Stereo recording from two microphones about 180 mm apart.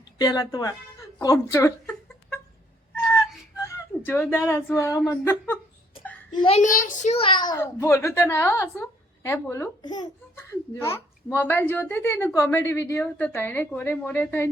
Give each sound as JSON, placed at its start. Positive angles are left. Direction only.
{"t": 0.2, "sound": "speech", "side_deg": 20}
{"t": 1.2, "sound": "a sound", "side_deg": 15}
{"t": 4.0, "sound": "a woman's voice", "side_deg": 10}
{"t": 6.3, "sound": "speech", "side_deg": 30}
{"t": 6.6, "sound": "a child's voice", "side_deg": 50}